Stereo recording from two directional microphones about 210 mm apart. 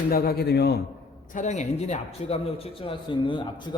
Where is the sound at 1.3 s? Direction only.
35° left (ahead or behind).